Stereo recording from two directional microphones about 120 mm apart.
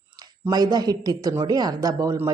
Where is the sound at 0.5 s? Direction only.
35° right (ahead or behind).